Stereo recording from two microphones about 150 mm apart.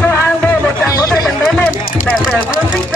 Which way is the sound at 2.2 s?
5° right (ahead or behind).